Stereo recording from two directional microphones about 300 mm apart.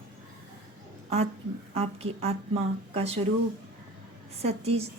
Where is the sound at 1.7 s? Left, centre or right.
Centre.